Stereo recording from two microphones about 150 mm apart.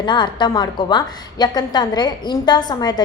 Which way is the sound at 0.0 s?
30° left (ahead or behind).